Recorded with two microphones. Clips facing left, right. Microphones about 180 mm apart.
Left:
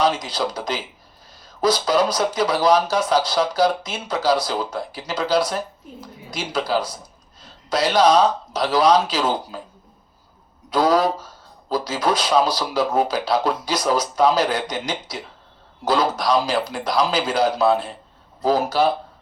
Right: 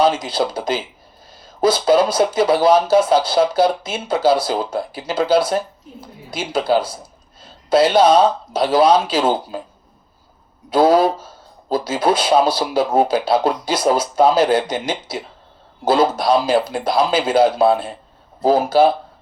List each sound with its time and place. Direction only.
0.2 s speech: 25° right (ahead or behind)
10.7 s speech: 25° right (ahead or behind)